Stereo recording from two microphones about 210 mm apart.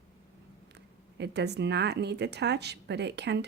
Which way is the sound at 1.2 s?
55° right (ahead or behind).